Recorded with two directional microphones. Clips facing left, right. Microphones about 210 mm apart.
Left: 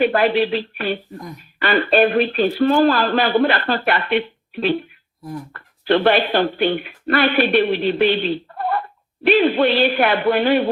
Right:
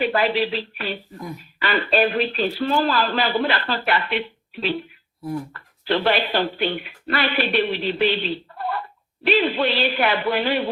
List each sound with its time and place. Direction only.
0.0 s speech: 50° left (ahead or behind)